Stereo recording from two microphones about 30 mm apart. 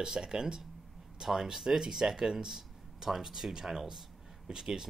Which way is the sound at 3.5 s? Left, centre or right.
Right.